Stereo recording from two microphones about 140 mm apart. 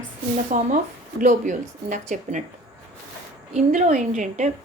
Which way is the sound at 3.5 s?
65° right (ahead or behind).